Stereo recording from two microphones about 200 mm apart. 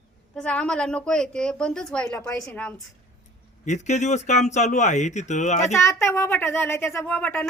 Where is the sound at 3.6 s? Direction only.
35° left (ahead or behind).